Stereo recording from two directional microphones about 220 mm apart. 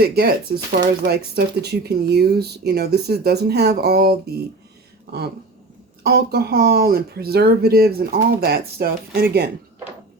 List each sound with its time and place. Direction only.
0.0 s speech: 45° right (ahead or behind)
6.0 s speech: 45° right (ahead or behind)